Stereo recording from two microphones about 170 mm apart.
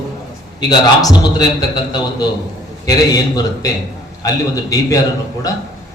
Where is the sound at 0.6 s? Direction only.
25° left (ahead or behind).